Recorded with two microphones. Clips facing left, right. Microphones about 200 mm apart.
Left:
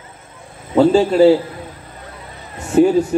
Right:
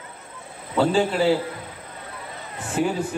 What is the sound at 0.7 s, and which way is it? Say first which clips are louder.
Speech: left 8 dB; 45° left (ahead or behind).